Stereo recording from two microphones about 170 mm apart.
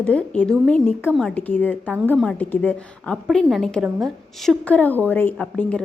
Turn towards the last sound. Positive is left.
turn(degrees=5)  # may be behind; listen again after turning